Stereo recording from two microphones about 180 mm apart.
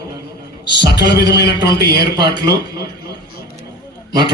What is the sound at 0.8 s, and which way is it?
A man's voice, 70° left (ahead or behind).